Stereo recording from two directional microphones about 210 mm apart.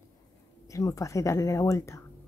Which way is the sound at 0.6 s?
15° left (ahead or behind).